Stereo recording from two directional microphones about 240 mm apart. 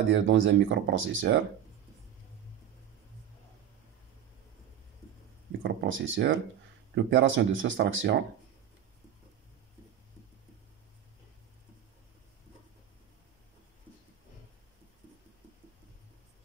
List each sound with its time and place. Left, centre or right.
0.1 s speech: right
5.6 s speech: right